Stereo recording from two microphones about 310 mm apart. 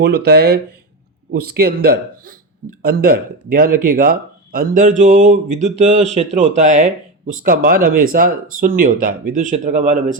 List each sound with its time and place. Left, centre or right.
0.0 s speech: right